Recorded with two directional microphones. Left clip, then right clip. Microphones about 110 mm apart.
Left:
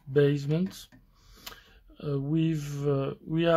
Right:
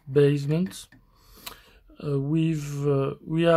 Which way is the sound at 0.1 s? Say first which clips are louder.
Right 3 dB; 30° right (ahead or behind).